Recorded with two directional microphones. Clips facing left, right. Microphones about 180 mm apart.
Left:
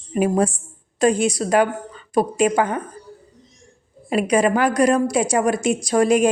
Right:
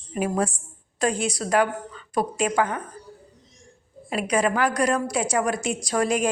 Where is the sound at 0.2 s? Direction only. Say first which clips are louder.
Left 6 dB; 25° left (ahead or behind).